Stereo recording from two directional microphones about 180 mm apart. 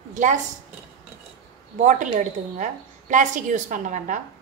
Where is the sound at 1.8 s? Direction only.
45° right (ahead or behind).